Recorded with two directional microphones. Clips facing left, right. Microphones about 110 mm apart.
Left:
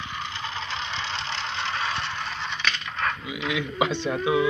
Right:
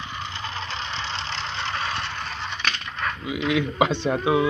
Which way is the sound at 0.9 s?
30° right (ahead or behind).